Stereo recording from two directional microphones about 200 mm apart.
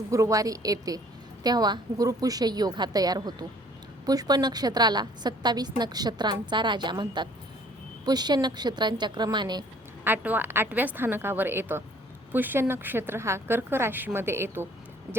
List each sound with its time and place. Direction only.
0.1 s a woman's voice: 15° right (ahead or behind)
10.0 s a woman's voice: 10° right (ahead or behind)